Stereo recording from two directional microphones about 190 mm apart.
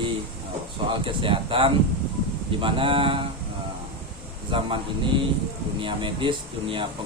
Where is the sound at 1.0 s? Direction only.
25° right (ahead or behind).